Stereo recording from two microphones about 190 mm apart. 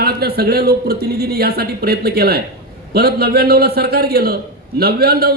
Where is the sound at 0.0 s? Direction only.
55° right (ahead or behind).